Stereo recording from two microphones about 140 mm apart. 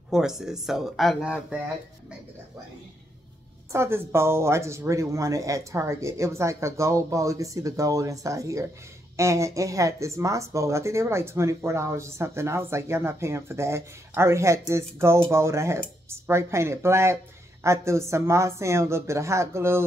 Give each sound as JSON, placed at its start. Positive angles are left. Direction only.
{"t": 0.1, "sound": "speech", "side_deg": -5}
{"t": 3.7, "sound": "speech", "side_deg": -20}